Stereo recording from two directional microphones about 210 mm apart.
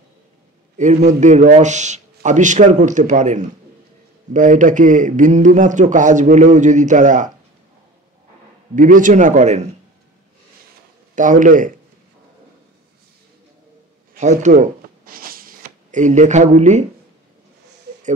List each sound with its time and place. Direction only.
0.7 s a man's voice: 35° right (ahead or behind)
8.7 s a man's voice: 40° right (ahead or behind)
11.1 s a man's voice: 40° right (ahead or behind)
14.1 s a sound: 35° right (ahead or behind)